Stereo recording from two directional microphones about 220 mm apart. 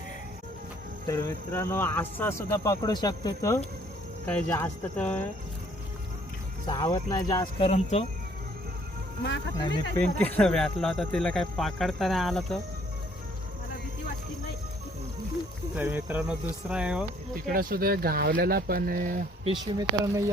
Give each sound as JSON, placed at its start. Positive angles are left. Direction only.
{"t": 1.0, "sound": "speech", "side_deg": 15}
{"t": 6.7, "sound": "speech", "side_deg": 20}
{"t": 7.7, "sound": "speech", "side_deg": 30}
{"t": 9.6, "sound": "speech", "side_deg": 20}
{"t": 10.0, "sound": "speech", "side_deg": 5}
{"t": 15.7, "sound": "speech", "side_deg": -10}
{"t": 17.4, "sound": "speech", "side_deg": -40}
{"t": 19.5, "sound": "speech", "side_deg": -20}